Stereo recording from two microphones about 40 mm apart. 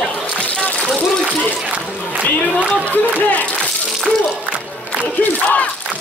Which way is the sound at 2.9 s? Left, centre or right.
Left.